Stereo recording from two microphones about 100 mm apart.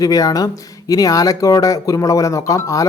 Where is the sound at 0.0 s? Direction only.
35° left (ahead or behind).